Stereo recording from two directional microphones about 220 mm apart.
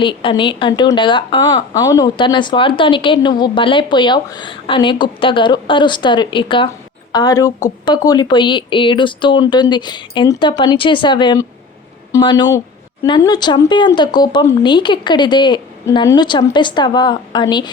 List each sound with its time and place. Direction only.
0.0 s speech: 20° left (ahead or behind)